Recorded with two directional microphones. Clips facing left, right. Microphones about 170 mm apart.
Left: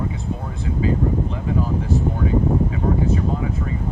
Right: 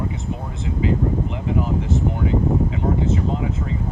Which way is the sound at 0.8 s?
20° right (ahead or behind).